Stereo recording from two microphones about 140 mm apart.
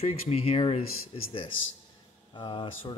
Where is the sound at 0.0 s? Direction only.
45° left (ahead or behind).